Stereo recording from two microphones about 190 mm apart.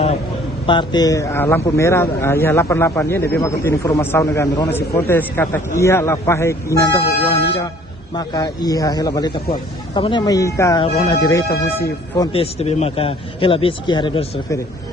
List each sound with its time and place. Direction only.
0.7 s a man's voice: 25° left (ahead or behind)
8.1 s speech: 20° left (ahead or behind)